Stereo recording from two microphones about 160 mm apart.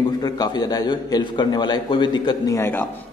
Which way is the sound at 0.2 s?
25° left (ahead or behind).